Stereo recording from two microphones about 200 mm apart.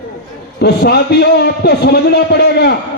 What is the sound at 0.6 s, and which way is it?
A man's voice, 55° left (ahead or behind).